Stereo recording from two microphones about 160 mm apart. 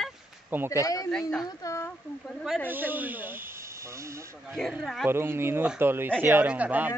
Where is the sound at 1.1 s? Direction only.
5° left (ahead or behind).